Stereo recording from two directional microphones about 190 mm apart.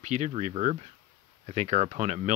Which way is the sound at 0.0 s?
40° right (ahead or behind).